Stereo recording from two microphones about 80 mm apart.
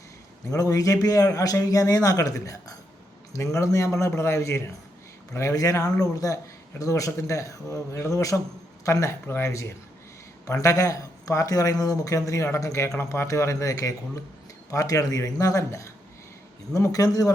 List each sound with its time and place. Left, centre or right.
0.5 s a man's voice: left